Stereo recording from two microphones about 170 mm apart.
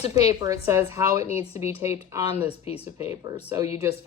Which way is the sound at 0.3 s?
20° right (ahead or behind).